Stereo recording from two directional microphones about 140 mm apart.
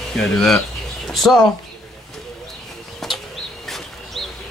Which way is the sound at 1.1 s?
Centre (ahead or behind).